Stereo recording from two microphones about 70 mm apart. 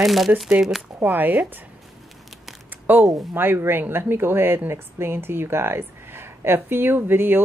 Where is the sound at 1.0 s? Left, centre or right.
Right.